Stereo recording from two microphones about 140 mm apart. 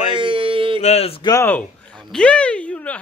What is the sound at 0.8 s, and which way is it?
Speech, 50° left (ahead or behind).